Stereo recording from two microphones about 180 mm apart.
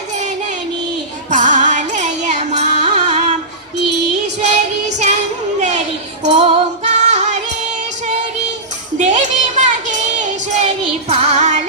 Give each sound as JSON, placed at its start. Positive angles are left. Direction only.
{"t": 0.1, "sound": "music", "side_deg": -40}
{"t": 4.4, "sound": "music", "side_deg": -40}
{"t": 5.5, "sound": "children playing", "side_deg": -40}
{"t": 6.2, "sound": "music", "side_deg": -40}
{"t": 9.0, "sound": "a sound", "side_deg": -40}
{"t": 11.1, "sound": "music", "side_deg": -35}